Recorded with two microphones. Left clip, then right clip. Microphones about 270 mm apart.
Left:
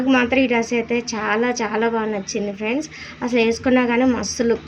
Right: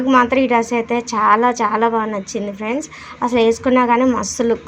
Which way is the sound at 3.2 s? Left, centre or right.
Centre.